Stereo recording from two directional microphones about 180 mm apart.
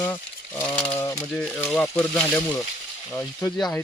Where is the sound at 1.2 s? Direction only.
5° left (ahead or behind).